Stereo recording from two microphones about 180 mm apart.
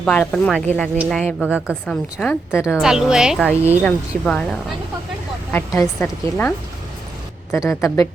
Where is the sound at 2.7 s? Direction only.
Centre (ahead or behind).